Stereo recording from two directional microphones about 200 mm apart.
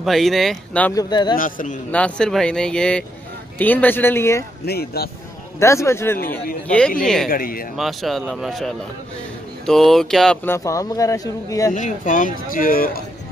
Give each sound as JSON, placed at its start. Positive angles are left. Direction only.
{"t": 0.0, "sound": "speech", "side_deg": 0}
{"t": 0.9, "sound": "a man's voice", "side_deg": 20}
{"t": 1.3, "sound": "a man's voice", "side_deg": 40}
{"t": 1.9, "sound": "speech", "side_deg": 5}
{"t": 4.6, "sound": "speech", "side_deg": 50}
{"t": 5.6, "sound": "speech", "side_deg": 15}
{"t": 7.0, "sound": "speech", "side_deg": 0}
{"t": 7.2, "sound": "speech", "side_deg": 45}
{"t": 7.7, "sound": "speech", "side_deg": 0}
{"t": 11.7, "sound": "speech", "side_deg": 40}